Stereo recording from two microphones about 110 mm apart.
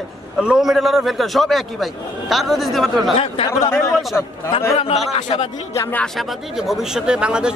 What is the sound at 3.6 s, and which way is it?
Speech, 25° left (ahead or behind).